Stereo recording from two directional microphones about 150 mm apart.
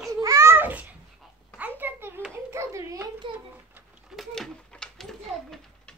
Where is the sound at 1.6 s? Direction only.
10° right (ahead or behind).